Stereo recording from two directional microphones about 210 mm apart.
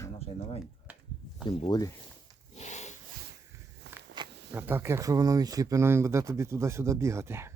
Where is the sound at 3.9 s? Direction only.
55° right (ahead or behind).